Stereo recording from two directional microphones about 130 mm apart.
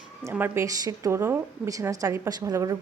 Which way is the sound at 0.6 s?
25° right (ahead or behind).